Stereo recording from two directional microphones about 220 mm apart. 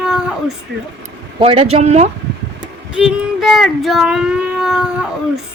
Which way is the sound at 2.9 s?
5° right (ahead or behind).